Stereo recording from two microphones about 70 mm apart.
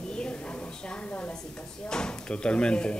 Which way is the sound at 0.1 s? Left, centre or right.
Centre.